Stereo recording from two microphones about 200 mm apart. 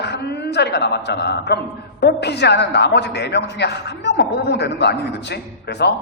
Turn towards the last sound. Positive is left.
turn(degrees=55)  # may be behind; listen again after turning